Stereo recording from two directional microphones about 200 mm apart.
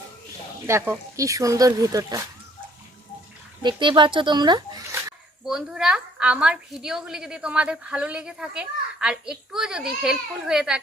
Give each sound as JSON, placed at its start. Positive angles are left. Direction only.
{"t": 0.7, "sound": "speech", "side_deg": -15}
{"t": 3.6, "sound": "speech", "side_deg": -25}
{"t": 5.5, "sound": "a woman's voice", "side_deg": -5}